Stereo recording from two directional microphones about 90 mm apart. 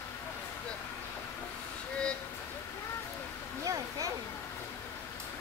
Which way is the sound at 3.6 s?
40° right (ahead or behind).